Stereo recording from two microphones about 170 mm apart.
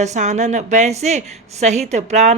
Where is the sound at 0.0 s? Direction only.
45° right (ahead or behind).